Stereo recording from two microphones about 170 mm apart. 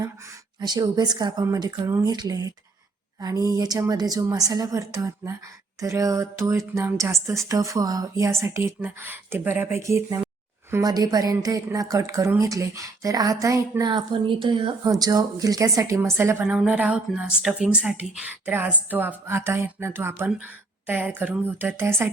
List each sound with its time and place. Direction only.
0.6 s a woman's voice: 25° right (ahead or behind)